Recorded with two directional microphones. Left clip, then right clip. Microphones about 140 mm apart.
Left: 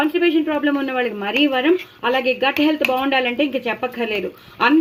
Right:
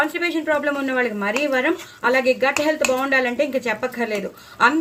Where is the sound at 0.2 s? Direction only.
15° left (ahead or behind).